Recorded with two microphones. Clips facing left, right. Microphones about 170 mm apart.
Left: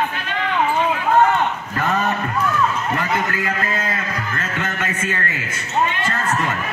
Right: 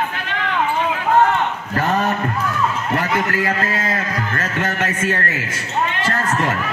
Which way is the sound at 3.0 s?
40° right (ahead or behind).